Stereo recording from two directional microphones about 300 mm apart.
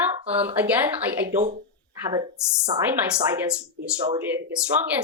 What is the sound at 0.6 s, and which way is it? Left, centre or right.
Speech, centre.